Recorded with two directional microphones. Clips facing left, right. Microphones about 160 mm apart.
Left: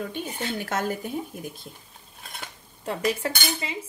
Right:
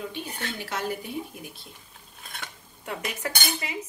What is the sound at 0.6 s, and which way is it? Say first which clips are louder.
Speech: left 3 dB; 50° left (ahead or behind).